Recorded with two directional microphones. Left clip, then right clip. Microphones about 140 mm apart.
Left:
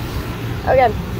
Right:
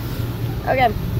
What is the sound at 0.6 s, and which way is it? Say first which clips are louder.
Speech: left 4 dB; 30° right (ahead or behind).